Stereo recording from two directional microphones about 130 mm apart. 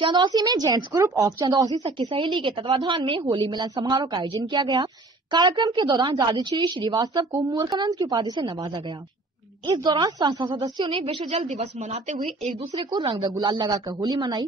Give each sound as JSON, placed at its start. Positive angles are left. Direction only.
{"t": 0.0, "sound": "a woman's voice", "side_deg": -35}
{"t": 11.1, "sound": "a woman's voice", "side_deg": -50}
{"t": 13.0, "sound": "a woman's voice", "side_deg": -40}